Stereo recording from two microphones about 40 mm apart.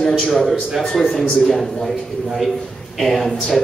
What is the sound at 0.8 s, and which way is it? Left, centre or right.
A man's voice, centre.